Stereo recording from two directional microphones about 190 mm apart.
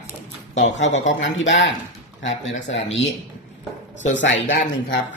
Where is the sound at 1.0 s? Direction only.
75° left (ahead or behind).